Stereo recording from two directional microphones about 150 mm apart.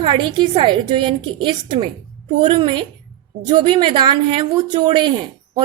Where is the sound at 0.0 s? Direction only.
30° right (ahead or behind).